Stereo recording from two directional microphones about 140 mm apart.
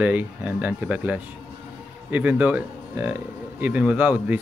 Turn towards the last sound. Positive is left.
turn(degrees=-10)  # may be behind; listen again after turning